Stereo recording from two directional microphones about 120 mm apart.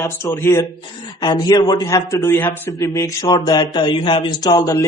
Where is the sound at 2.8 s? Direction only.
25° left (ahead or behind); by 4.1 s 45° left (ahead or behind).